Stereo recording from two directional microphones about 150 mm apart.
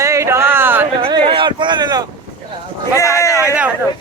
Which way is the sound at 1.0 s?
35° right (ahead or behind).